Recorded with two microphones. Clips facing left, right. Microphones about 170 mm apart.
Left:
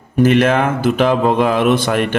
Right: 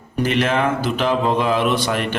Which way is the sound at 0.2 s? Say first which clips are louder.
Left 6 dB; 50° left (ahead or behind).